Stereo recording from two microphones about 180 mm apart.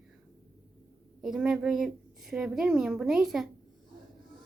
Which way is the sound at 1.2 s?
5° right (ahead or behind).